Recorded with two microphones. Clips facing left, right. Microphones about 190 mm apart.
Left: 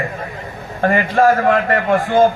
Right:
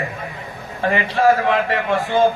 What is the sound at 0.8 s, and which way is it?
A man's voice, 50° left (ahead or behind).